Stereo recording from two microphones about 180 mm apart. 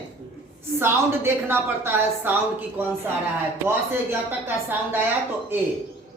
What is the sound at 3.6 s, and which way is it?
Speech, 10° right (ahead or behind).